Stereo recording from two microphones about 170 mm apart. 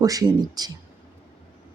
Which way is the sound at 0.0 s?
20° right (ahead or behind).